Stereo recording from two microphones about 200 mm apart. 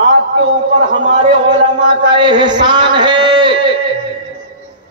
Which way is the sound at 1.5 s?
40° right (ahead or behind).